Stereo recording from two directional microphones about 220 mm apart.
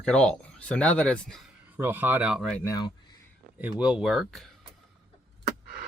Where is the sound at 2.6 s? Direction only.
15° left (ahead or behind).